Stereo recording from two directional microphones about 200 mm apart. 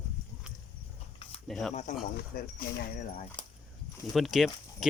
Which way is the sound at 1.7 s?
35° left (ahead or behind).